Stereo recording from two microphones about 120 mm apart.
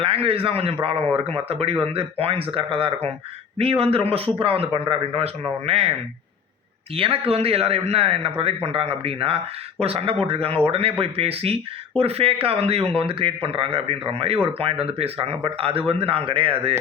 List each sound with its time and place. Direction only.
0.0 s speech: 50° right (ahead or behind)
6.9 s speech: 50° right (ahead or behind)